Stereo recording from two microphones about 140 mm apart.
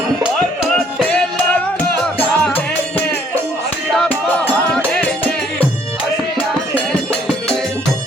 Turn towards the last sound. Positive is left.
turn(degrees=10)  # may be behind; listen again after turning